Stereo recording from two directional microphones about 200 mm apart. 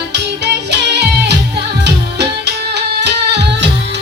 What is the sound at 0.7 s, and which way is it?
Music, 55° right (ahead or behind).